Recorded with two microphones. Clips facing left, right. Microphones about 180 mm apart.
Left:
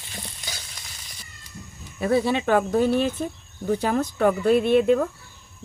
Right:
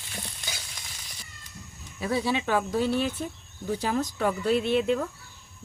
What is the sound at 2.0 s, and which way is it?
Speech, 55° left (ahead or behind).